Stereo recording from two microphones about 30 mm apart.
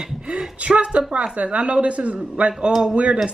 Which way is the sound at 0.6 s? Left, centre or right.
Right.